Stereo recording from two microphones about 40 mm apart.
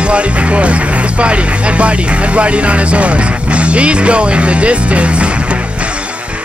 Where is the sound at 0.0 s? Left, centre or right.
Right.